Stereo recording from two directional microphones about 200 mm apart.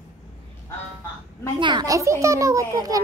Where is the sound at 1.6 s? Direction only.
20° right (ahead or behind).